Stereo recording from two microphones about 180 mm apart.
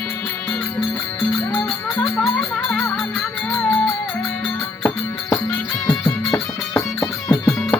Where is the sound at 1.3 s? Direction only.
5° left (ahead or behind).